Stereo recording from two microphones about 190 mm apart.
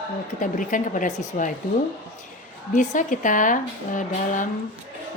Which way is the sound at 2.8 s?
40° left (ahead or behind).